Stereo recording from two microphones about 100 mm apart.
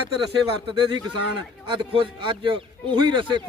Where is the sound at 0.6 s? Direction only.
45° right (ahead or behind).